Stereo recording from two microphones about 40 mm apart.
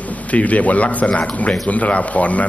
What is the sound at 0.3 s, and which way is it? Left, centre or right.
A man's voice, left.